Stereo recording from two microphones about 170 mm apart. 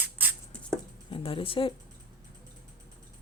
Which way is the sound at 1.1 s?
30° left (ahead or behind).